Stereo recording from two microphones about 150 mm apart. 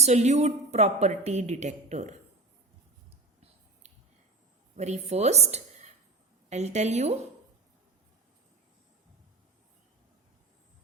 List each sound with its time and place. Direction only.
0.0 s speech: 50° right (ahead or behind)
4.8 s a woman's voice: 45° right (ahead or behind)